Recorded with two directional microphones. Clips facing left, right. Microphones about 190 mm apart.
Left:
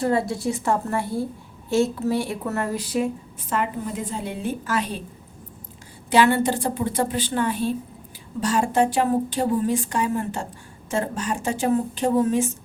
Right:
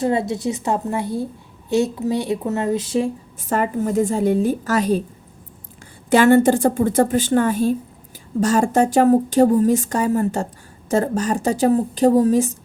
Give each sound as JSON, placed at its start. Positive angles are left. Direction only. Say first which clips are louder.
{"t": 0.0, "sound": "speech", "louder": "right 2 dB", "side_deg": -20}
{"t": 3.5, "sound": "speech", "louder": "right 7 dB", "side_deg": -45}
{"t": 6.1, "sound": "speech", "louder": "right 6 dB", "side_deg": -45}